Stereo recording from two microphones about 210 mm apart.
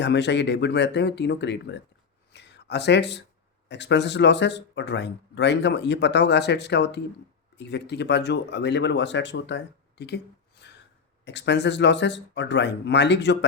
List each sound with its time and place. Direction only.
0.0 s speech: 55° left (ahead or behind)
2.3 s a sound: 55° left (ahead or behind)
3.7 s speech: 55° left (ahead or behind)